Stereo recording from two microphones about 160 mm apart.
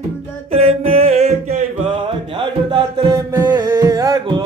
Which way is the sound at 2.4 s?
30° right (ahead or behind).